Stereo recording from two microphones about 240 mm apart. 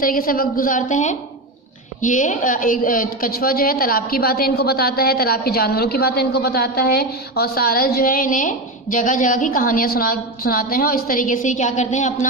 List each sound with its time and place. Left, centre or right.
0.0 s a woman's voice: left